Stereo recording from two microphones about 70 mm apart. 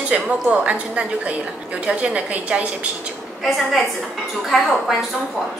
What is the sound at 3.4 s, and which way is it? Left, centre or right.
A woman's voice, centre.